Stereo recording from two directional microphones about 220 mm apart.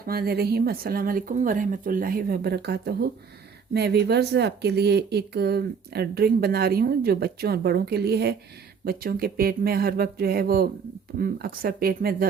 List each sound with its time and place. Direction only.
0.0 s speech: 45° right (ahead or behind)